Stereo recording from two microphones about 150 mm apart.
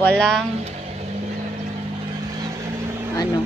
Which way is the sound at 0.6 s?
45° right (ahead or behind).